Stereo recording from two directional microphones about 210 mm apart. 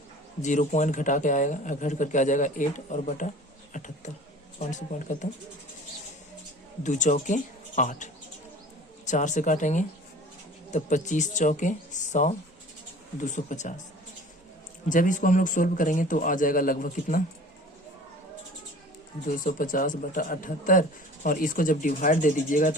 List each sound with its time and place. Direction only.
0.4 s a man's voice: 35° left (ahead or behind)
6.8 s a man's voice: 35° left (ahead or behind)
14.8 s a man's voice: 40° left (ahead or behind)
19.3 s a man's voice: 40° left (ahead or behind)